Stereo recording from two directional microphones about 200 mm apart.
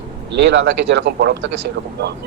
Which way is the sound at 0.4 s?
60° right (ahead or behind).